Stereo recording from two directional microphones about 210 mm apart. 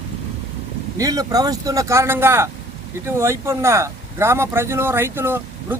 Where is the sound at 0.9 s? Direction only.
15° right (ahead or behind).